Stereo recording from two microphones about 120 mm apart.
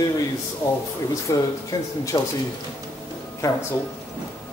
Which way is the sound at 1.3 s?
30° left (ahead or behind).